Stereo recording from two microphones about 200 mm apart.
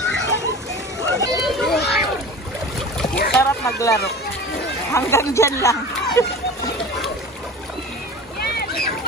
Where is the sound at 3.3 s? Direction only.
15° left (ahead or behind).